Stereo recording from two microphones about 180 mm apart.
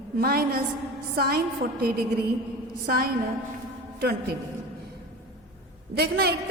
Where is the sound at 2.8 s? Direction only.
55° right (ahead or behind).